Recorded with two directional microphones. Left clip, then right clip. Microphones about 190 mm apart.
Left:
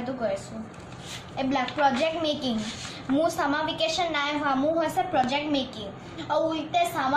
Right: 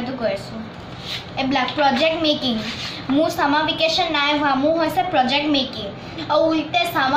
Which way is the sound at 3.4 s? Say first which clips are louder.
Right 8 dB; 20° left (ahead or behind).